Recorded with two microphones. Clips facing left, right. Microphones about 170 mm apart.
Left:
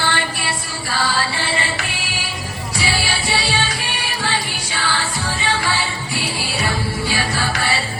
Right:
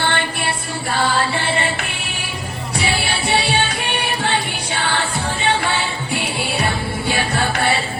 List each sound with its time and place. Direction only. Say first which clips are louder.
0.0 s music: right 2 dB; 55° right (ahead or behind)
2.7 s music: right 1 dB; 55° right (ahead or behind)